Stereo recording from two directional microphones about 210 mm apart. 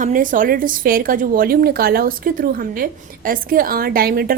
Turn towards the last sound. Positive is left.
turn(degrees=-45)  # may be behind; listen again after turning